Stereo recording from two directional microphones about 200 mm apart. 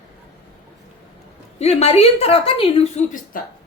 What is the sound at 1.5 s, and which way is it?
Speech, 30° left (ahead or behind).